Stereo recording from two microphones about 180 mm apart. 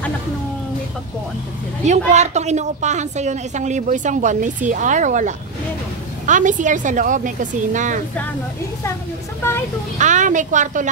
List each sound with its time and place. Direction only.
1.9 s a woman's voice: 40° right (ahead or behind)
9.9 s a woman's voice: 45° right (ahead or behind)